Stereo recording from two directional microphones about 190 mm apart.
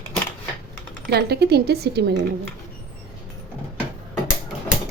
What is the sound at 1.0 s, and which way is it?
Speech, 60° right (ahead or behind).